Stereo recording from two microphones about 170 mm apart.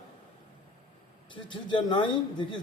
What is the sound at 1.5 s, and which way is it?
A man's voice, 30° left (ahead or behind).